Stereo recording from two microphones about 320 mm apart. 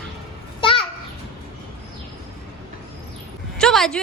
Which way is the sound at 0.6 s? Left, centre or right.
Centre.